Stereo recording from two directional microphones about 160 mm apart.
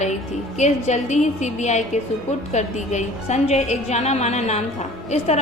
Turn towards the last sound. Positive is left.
turn(degrees=45)  # may be behind; listen again after turning